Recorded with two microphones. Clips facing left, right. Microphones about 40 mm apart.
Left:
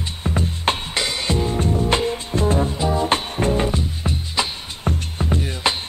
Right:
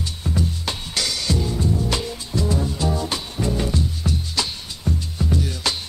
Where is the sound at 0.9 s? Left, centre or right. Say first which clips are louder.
Left 2 dB; left.